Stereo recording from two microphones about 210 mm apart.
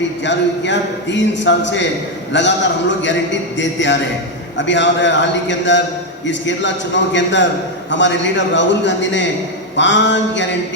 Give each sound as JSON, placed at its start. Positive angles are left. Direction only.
{"t": 0.3, "sound": "a man's voice", "side_deg": 55}
{"t": 3.6, "sound": "a man's voice", "side_deg": 60}